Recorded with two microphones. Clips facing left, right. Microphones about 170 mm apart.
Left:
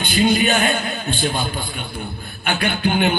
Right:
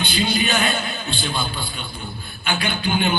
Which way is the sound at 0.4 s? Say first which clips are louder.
Left 3 dB; 45° left (ahead or behind).